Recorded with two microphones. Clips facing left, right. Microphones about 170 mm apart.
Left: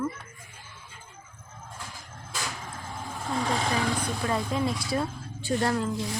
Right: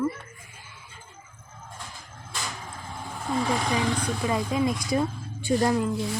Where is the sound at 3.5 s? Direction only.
10° right (ahead or behind).